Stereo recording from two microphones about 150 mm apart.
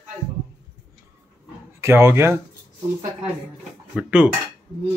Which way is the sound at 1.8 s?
15° right (ahead or behind).